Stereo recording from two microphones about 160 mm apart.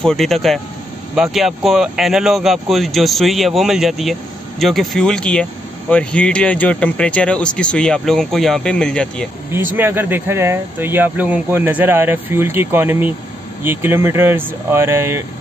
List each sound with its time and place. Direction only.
0.0 s speech: centre (ahead or behind)
9.8 s speech: 15° right (ahead or behind)